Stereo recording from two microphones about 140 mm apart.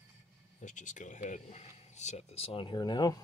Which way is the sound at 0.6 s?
65° left (ahead or behind).